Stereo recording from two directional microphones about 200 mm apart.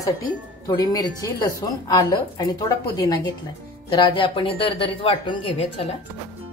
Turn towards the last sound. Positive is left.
turn(degrees=25)  # may be behind; listen again after turning